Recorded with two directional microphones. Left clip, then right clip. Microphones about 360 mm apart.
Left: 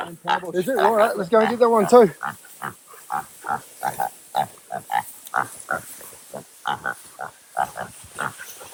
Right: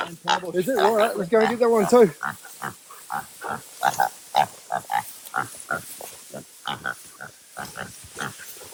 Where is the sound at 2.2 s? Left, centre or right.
Centre.